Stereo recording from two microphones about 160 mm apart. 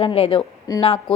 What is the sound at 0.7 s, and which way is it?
Speech, 20° left (ahead or behind).